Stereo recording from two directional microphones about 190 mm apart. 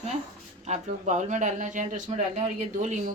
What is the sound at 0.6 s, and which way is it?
Speech, 40° right (ahead or behind).